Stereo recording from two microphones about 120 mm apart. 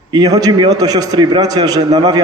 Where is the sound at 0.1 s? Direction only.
35° right (ahead or behind).